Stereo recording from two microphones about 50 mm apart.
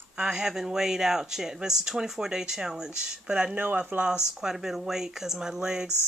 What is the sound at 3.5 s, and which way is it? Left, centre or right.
Speech, right.